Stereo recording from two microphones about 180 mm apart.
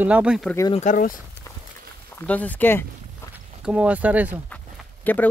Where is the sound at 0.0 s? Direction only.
5° right (ahead or behind).